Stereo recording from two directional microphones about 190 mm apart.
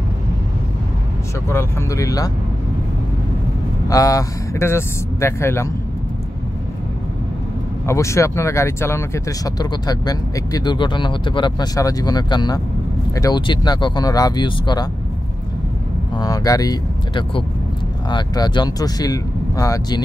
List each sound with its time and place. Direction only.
1.5 s speech: 15° left (ahead or behind)
3.9 s speech: 15° left (ahead or behind)
7.8 s speech: 15° left (ahead or behind)
16.2 s speech: 20° left (ahead or behind)